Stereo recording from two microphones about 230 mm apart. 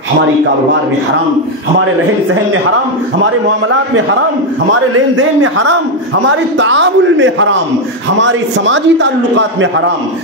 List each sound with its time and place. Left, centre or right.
3.6 s a man's voice: right